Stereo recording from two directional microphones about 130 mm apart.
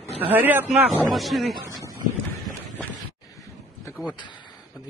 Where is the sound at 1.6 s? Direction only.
25° right (ahead or behind).